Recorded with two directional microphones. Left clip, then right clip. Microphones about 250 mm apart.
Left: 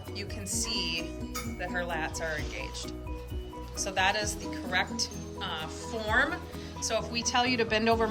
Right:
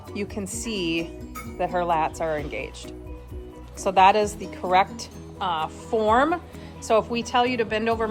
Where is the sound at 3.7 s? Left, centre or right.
Centre.